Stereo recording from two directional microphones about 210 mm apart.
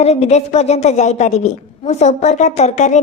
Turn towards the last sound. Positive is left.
turn(degrees=35)  # may be behind; listen again after turning